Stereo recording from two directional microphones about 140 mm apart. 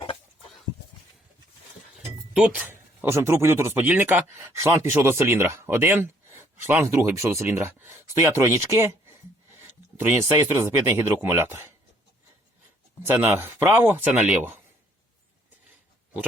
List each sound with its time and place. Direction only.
2.3 s speech: 10° right (ahead or behind)
13.1 s speech: 20° right (ahead or behind)